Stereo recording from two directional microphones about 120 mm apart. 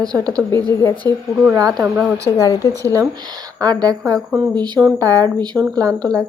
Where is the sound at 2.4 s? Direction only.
30° left (ahead or behind).